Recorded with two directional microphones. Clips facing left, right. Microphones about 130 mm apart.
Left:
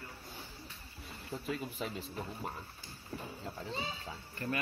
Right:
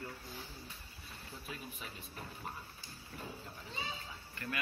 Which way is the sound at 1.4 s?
90° left.